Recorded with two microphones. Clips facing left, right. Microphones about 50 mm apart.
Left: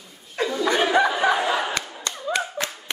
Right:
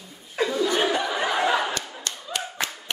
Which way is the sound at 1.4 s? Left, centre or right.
Centre.